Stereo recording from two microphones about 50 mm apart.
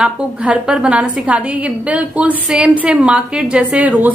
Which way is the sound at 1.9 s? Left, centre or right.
Right.